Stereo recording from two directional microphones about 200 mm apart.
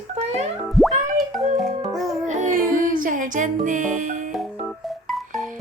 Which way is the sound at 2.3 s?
40° right (ahead or behind).